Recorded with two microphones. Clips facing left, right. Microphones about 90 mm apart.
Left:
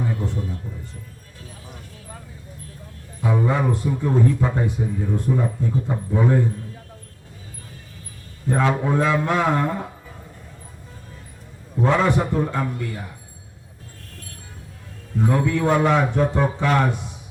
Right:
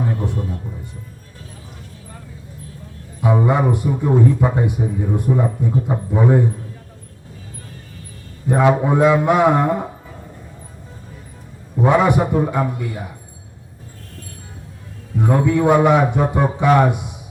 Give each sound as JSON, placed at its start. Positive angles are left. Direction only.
{"t": 0.0, "sound": "a sound", "side_deg": -15}
{"t": 3.2, "sound": "a man's voice", "side_deg": -15}
{"t": 8.4, "sound": "a man's voice", "side_deg": -15}
{"t": 11.8, "sound": "a man's voice", "side_deg": -15}
{"t": 15.2, "sound": "a man's voice", "side_deg": -15}